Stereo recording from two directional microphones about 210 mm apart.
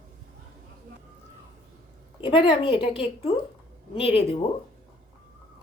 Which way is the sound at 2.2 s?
25° left (ahead or behind).